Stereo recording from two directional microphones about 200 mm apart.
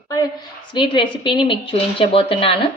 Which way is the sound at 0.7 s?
25° left (ahead or behind).